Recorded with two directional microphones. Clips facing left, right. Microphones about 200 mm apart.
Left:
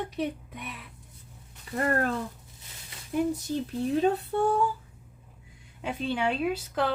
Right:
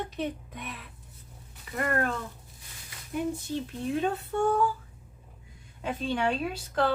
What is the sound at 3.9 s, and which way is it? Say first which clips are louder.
Female singing: left 3 dB; 35° left (ahead or behind).